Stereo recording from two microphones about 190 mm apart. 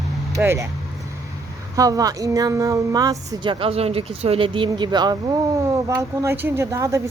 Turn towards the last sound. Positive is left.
turn(degrees=-15)  # may be behind; listen again after turning